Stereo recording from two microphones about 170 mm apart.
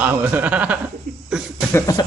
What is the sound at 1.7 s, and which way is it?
Speech, 20° left (ahead or behind).